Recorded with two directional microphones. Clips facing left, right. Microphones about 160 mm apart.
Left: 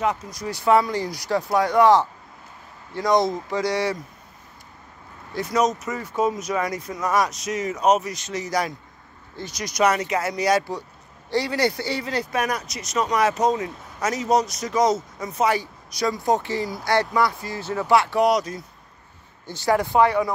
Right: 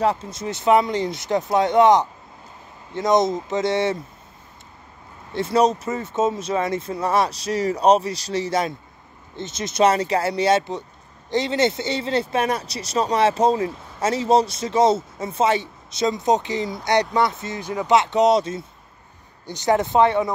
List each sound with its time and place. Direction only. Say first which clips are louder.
0.0 s speech: right 3 dB; 30° right (ahead or behind)
5.3 s speech: right 3 dB; 30° right (ahead or behind)